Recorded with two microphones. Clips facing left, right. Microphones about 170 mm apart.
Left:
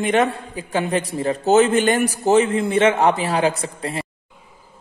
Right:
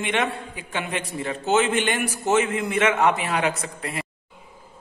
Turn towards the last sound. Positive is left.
turn(degrees=30)  # may be behind; listen again after turning